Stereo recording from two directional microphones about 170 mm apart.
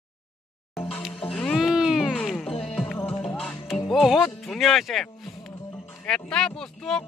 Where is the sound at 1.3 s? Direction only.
Centre (ahead or behind).